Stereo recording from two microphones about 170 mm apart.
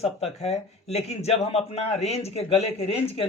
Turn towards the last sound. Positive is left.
turn(degrees=35)  # may be behind; listen again after turning